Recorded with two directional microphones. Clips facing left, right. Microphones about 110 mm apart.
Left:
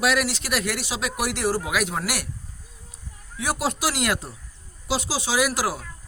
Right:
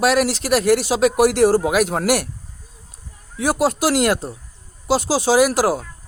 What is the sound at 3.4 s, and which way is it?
Speech, 45° right (ahead or behind).